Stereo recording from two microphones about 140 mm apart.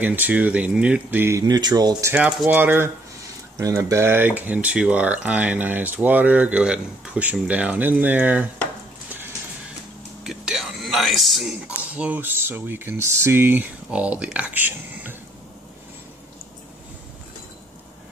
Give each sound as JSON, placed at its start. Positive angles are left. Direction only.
{"t": 0.0, "sound": "speech", "side_deg": -10}
{"t": 1.5, "sound": "speech", "side_deg": -30}
{"t": 2.1, "sound": "speech", "side_deg": -10}
{"t": 10.2, "sound": "a sound", "side_deg": -5}
{"t": 11.8, "sound": "speech", "side_deg": -10}